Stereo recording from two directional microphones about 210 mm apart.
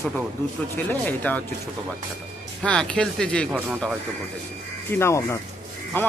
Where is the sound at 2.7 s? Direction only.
5° left (ahead or behind).